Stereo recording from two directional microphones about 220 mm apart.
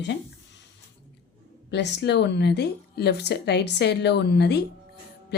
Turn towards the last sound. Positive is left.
turn(degrees=50)  # may be behind; listen again after turning